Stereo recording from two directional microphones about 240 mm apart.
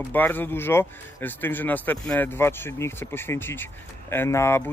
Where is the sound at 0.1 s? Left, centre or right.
Centre.